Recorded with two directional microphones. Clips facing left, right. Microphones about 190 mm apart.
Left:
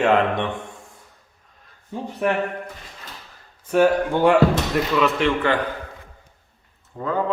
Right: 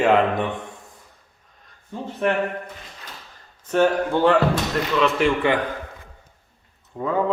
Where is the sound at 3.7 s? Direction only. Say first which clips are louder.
Left 2 dB; 10° left (ahead or behind).